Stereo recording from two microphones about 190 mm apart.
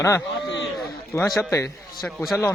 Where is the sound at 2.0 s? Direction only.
Centre (ahead or behind).